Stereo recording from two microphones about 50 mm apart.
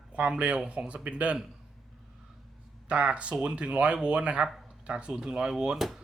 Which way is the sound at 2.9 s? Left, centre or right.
Right.